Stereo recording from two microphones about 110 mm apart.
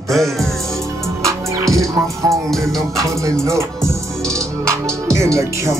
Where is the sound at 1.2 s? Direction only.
30° right (ahead or behind).